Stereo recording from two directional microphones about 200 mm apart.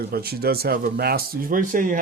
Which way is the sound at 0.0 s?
50° right (ahead or behind).